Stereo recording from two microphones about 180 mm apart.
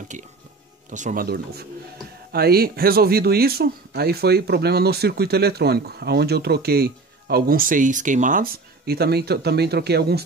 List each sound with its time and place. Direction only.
0.1 s speech: 45° right (ahead or behind); by 10.2 s 65° right (ahead or behind)